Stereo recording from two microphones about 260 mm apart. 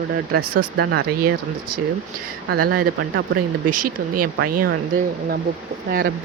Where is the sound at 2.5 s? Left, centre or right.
Right.